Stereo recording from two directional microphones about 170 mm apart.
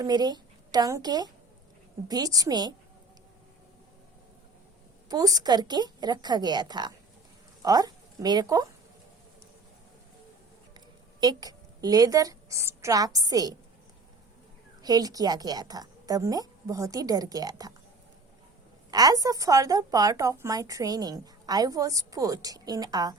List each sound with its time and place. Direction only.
0.0 s a woman's voice: 25° right (ahead or behind)
5.0 s a woman's voice: 20° right (ahead or behind)
10.8 s a woman's voice: 25° right (ahead or behind)
14.8 s a woman's voice: 20° right (ahead or behind)
18.9 s a woman's voice: 20° right (ahead or behind)